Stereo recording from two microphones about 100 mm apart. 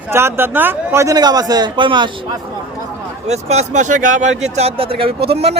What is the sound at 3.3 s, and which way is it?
Speech, 90° right.